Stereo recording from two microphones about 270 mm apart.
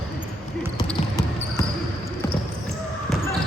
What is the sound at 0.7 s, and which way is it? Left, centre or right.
Basketball bounce, centre.